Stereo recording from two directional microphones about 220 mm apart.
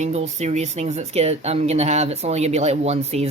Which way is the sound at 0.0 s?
30° right (ahead or behind).